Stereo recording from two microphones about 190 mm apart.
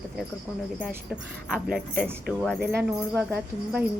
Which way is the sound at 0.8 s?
5° right (ahead or behind).